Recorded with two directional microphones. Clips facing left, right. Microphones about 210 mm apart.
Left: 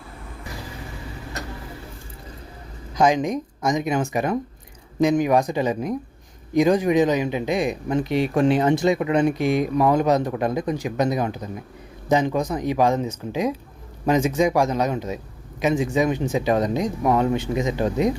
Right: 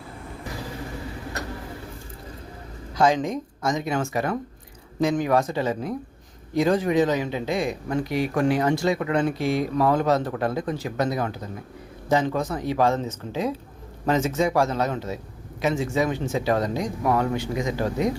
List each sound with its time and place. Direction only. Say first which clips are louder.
2.9 s speech: left 2 dB; 15° left (ahead or behind)